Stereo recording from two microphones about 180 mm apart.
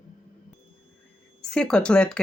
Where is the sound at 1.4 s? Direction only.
5° left (ahead or behind).